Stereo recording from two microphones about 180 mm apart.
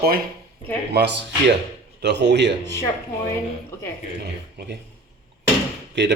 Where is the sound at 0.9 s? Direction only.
70° right (ahead or behind).